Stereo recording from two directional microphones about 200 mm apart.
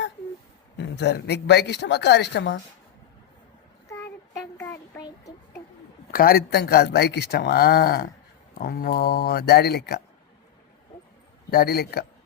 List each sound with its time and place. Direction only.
0.9 s speech: 55° left (ahead or behind)
4.5 s a sound: 10° left (ahead or behind)
6.1 s speech: 50° left (ahead or behind)
11.5 s speech: 50° left (ahead or behind)